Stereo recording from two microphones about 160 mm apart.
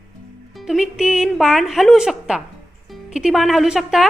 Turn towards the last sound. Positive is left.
turn(degrees=0)  # may be behind; listen again after turning